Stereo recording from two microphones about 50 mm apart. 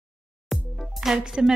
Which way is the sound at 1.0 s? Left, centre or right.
Centre.